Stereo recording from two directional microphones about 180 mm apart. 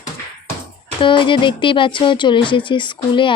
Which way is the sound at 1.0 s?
25° left (ahead or behind).